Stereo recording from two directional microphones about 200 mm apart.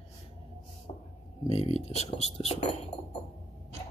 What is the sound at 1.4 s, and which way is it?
Speech, 30° left (ahead or behind).